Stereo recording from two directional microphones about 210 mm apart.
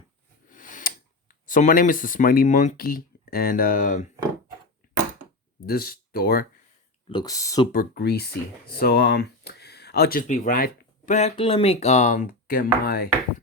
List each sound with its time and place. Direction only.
0.5 s tick: 40° left (ahead or behind)
1.5 s speech: 40° left (ahead or behind)
5.6 s speech: 45° left (ahead or behind)
7.1 s speech: 20° left (ahead or behind)
7.7 s speech: 45° left (ahead or behind)